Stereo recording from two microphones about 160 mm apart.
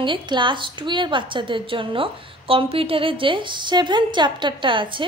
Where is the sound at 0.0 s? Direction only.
30° right (ahead or behind).